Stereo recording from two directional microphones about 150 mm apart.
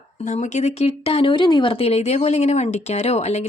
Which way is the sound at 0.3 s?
50° left (ahead or behind).